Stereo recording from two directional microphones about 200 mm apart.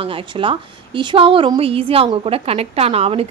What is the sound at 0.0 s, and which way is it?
A woman's voice, 25° right (ahead or behind).